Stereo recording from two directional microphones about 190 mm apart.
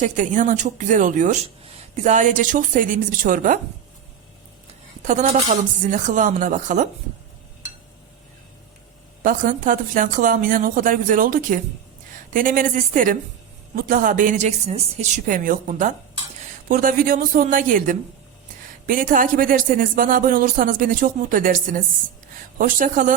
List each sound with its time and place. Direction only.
0.0 s speech: 40° right (ahead or behind)
5.0 s speech: 40° right (ahead or behind)
9.2 s speech: 45° right (ahead or behind)